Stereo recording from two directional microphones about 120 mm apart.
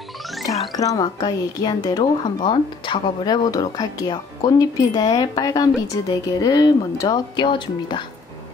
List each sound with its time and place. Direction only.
0.3 s music: centre (ahead or behind)
0.7 s a woman's voice: 30° left (ahead or behind)